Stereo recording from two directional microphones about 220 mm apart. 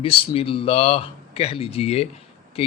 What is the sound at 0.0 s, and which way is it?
Speech, 25° left (ahead or behind).